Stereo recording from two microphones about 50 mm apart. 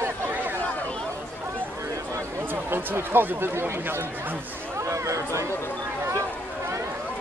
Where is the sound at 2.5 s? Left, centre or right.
Right.